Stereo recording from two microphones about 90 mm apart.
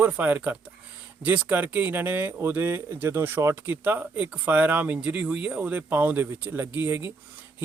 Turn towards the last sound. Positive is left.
turn(degrees=-25)  # may be behind; listen again after turning